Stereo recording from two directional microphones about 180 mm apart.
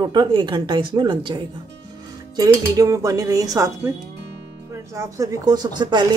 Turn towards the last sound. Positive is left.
turn(degrees=-25)  # may be behind; listen again after turning